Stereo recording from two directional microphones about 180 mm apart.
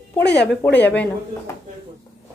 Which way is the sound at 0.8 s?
10° left (ahead or behind).